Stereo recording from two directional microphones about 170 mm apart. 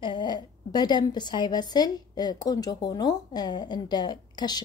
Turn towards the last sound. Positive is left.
turn(degrees=25)  # may be behind; listen again after turning